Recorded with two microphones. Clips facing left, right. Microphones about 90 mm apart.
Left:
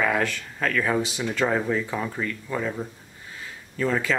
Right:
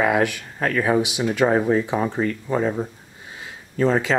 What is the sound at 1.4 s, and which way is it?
Speech, 30° right (ahead or behind).